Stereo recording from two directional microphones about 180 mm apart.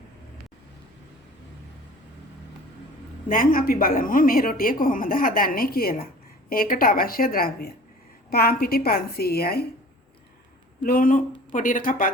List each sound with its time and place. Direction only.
3.2 s a woman's voice: 50° left (ahead or behind)
10.8 s a woman's voice: 50° left (ahead or behind)